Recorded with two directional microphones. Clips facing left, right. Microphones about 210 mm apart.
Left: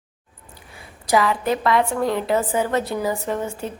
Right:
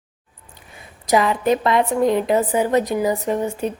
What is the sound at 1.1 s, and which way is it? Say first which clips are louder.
A woman's voice: right 2 dB; 20° right (ahead or behind).